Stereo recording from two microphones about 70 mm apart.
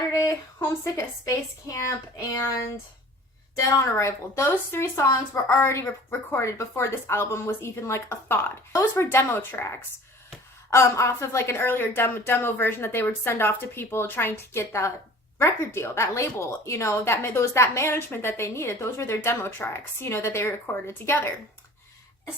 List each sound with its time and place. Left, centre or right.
0.9 s a woman's voice: left
3.5 s a woman's voice: left